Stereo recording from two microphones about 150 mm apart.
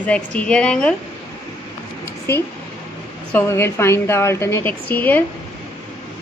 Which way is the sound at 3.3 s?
15° left (ahead or behind).